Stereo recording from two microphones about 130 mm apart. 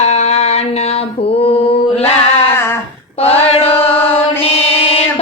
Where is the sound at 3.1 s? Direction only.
50° left (ahead or behind).